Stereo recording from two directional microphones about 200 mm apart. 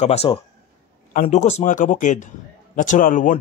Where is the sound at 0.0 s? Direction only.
30° left (ahead or behind).